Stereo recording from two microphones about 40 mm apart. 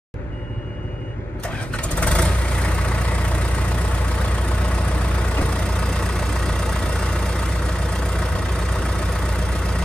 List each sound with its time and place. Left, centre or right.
1.8 s vehicle: left